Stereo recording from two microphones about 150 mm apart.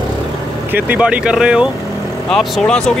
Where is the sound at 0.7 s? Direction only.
10° right (ahead or behind).